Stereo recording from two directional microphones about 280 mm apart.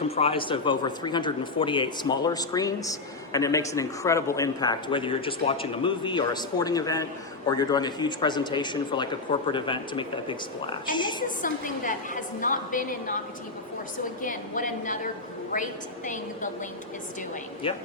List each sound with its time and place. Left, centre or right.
0.2 s speech: centre
11.4 s a woman's voice: left
14.2 s a woman's voice: left